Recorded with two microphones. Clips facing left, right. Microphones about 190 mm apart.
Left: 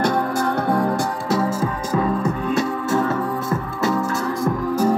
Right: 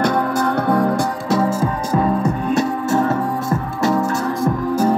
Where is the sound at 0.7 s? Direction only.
50° right (ahead or behind).